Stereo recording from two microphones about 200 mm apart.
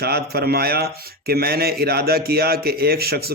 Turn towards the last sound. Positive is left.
turn(degrees=-50)  # may be behind; listen again after turning